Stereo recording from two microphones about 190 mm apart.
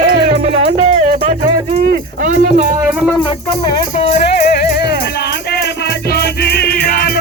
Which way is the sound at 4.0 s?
35° left (ahead or behind).